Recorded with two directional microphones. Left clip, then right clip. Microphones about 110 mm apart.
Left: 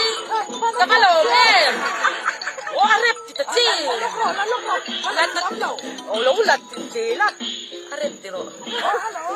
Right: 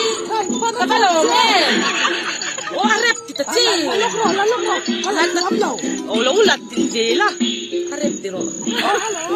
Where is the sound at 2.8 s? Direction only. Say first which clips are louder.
Even; 10° right (ahead or behind).